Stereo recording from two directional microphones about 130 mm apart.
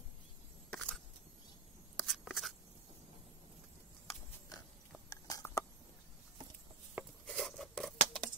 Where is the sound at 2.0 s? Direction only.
Centre (ahead or behind).